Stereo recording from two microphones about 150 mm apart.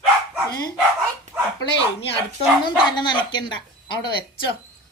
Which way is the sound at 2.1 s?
35° left (ahead or behind).